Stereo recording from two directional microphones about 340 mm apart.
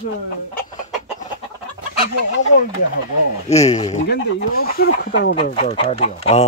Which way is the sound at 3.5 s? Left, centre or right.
Centre.